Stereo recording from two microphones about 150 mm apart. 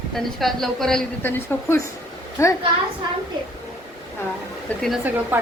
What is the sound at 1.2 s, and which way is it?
A woman's voice, 15° left (ahead or behind).